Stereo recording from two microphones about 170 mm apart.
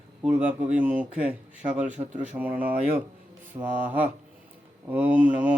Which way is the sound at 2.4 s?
10° right (ahead or behind).